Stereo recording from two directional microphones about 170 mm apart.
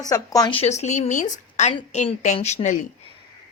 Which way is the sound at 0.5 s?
40° left (ahead or behind).